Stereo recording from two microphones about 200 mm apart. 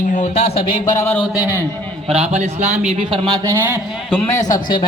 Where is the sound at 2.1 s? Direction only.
30° right (ahead or behind).